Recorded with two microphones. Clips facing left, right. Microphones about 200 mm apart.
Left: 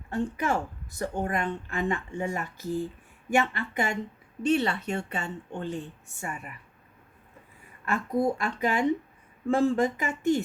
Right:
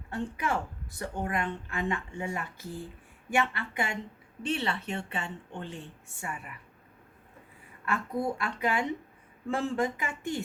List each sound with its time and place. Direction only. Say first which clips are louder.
0.1 s speech: left 4 dB; 45° left (ahead or behind)
7.9 s speech: left 5 dB; 45° left (ahead or behind)